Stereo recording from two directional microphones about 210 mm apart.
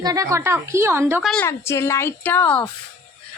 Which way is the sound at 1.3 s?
10° left (ahead or behind).